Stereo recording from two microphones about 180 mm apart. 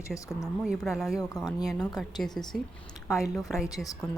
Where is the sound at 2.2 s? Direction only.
Centre (ahead or behind).